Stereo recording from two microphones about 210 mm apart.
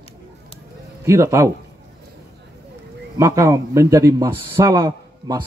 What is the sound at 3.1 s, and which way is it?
A man's voice, 15° right (ahead or behind).